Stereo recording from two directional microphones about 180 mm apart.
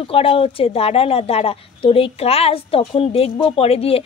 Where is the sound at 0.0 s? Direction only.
30° left (ahead or behind).